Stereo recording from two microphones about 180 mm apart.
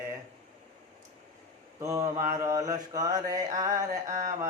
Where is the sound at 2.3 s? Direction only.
15° right (ahead or behind).